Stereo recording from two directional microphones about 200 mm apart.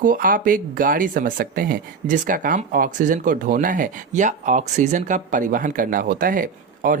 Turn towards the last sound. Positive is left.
turn(degrees=-45)  # may be behind; listen again after turning